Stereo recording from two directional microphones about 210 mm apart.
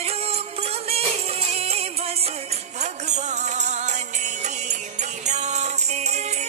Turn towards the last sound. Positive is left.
turn(degrees=-30)  # may be behind; listen again after turning